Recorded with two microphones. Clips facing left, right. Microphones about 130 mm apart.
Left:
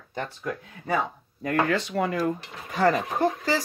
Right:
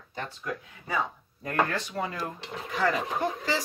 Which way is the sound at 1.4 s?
85° left.